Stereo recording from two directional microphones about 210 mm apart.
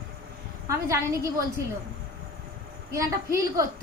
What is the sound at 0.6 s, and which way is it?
Speech, 15° right (ahead or behind).